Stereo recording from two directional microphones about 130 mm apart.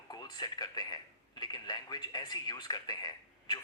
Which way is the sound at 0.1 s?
30° left (ahead or behind).